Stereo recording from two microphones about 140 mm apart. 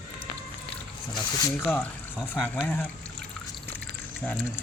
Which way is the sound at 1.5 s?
15° left (ahead or behind).